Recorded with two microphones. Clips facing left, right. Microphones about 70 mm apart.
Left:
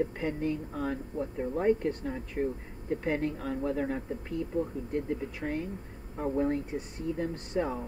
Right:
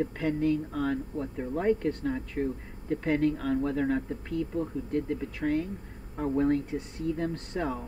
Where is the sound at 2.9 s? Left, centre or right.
Left.